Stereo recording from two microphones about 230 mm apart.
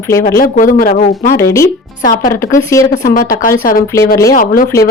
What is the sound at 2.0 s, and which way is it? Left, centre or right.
Speech, left.